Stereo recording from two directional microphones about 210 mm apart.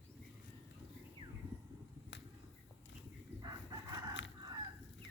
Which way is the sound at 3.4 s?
20° right (ahead or behind).